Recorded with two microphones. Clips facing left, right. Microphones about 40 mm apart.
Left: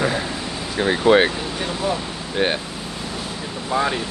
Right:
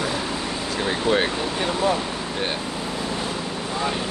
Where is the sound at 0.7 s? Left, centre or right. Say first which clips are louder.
Left 7 dB; left.